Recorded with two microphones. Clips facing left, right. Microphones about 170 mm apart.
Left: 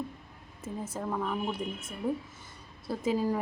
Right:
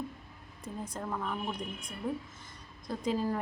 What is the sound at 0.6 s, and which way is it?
A woman's voice, 5° left (ahead or behind).